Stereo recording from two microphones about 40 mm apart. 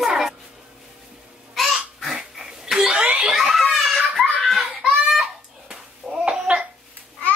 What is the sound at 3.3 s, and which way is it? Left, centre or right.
Giggle, centre.